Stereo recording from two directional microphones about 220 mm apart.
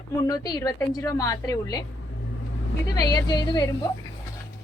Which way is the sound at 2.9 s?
20° left (ahead or behind).